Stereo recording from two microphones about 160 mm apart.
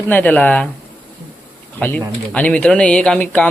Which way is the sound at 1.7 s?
10° left (ahead or behind).